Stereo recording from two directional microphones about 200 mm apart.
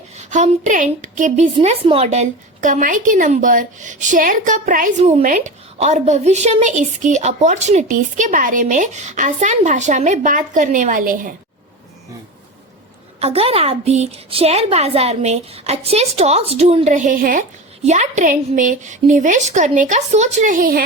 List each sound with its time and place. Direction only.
0.2 s a woman's voice: 35° right (ahead or behind)
1.5 s a woman's voice: 30° right (ahead or behind)
13.1 s a woman's voice: 30° right (ahead or behind)